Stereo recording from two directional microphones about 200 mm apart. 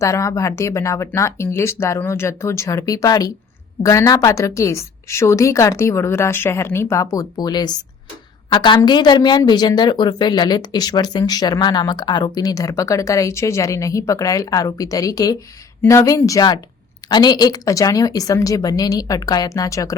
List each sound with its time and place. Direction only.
0.0 s a woman's voice: 15° left (ahead or behind)